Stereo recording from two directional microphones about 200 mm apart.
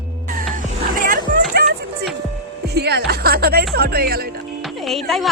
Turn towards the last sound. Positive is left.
turn(degrees=0)  # may be behind; listen again after turning